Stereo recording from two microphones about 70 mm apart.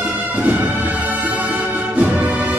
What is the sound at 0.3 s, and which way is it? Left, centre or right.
Music, right.